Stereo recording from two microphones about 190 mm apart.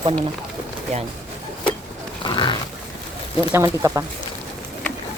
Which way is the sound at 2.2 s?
25° left (ahead or behind).